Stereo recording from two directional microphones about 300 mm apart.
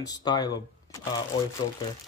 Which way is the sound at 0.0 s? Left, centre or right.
Centre.